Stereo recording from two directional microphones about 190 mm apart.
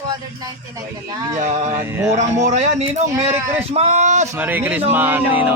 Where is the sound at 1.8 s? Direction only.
15° right (ahead or behind).